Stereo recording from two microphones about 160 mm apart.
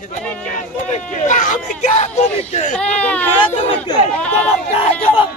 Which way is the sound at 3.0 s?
10° left (ahead or behind).